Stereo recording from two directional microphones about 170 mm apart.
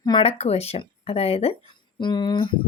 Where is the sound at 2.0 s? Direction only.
25° left (ahead or behind).